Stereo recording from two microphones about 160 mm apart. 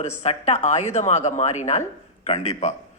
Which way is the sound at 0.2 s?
45° left (ahead or behind).